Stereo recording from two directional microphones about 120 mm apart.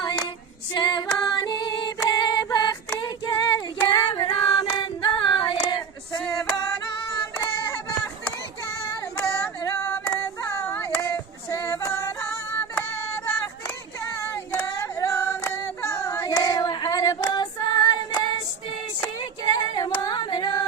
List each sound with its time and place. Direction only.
0.0 s female singing: 35° left (ahead or behind)
7.3 s child singing: 30° left (ahead or behind)
9.1 s female singing: 20° left (ahead or behind)
12.7 s a sound: 20° left (ahead or behind)
14.5 s female singing: 20° left (ahead or behind)
16.2 s female singing: 35° left (ahead or behind)